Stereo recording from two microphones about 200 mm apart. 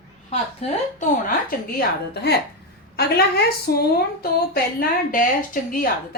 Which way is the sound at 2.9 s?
50° left (ahead or behind).